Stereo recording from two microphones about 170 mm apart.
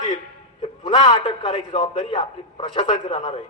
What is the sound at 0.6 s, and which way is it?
A man's voice, 30° left (ahead or behind).